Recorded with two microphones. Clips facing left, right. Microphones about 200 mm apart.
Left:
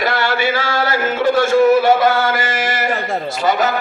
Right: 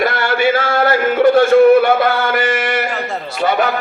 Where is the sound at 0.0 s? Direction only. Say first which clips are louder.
Right 3 dB; 55° right (ahead or behind).